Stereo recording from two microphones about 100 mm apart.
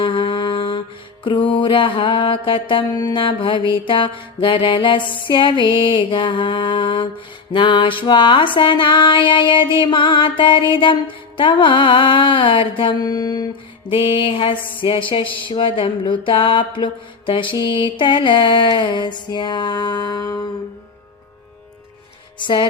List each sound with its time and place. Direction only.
0.0 s mantra: 55° left (ahead or behind)
1.2 s music: 55° left (ahead or behind)
2.9 s music: 45° left (ahead or behind)
13.0 s music: 40° left (ahead or behind)
13.8 s music: 60° left (ahead or behind)
14.8 s a sound: 55° left (ahead or behind); by 20.5 s 40° left (ahead or behind)
22.4 s a sound: 50° left (ahead or behind)